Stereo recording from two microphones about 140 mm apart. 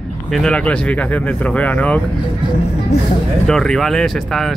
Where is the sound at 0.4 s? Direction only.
10° left (ahead or behind).